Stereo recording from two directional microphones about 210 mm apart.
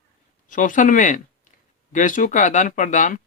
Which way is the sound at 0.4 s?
40° left (ahead or behind).